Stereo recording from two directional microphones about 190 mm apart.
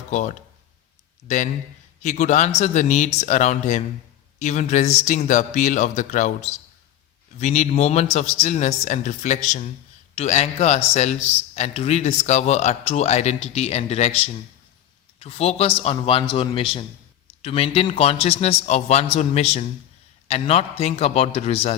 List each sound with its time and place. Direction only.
0.1 s a man's voice: 40° left (ahead or behind)
15.2 s a man's voice: 35° left (ahead or behind)